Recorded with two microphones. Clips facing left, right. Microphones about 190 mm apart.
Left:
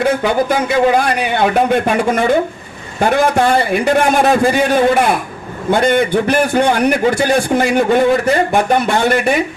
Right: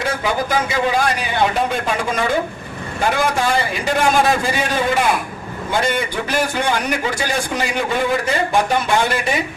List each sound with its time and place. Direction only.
0.0 s a man's voice: 55° left (ahead or behind)
5.8 s a man's voice: 55° left (ahead or behind)